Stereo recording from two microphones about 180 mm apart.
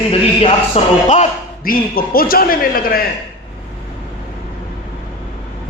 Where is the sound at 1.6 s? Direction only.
55° left (ahead or behind).